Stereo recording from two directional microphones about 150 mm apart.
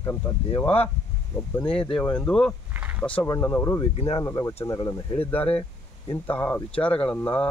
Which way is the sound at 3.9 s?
45° left (ahead or behind).